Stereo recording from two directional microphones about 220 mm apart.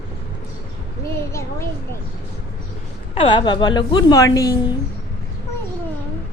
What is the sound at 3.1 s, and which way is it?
A woman's voice, 25° left (ahead or behind).